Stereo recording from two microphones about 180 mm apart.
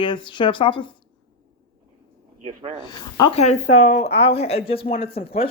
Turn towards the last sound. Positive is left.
turn(degrees=30)  # may be behind; listen again after turning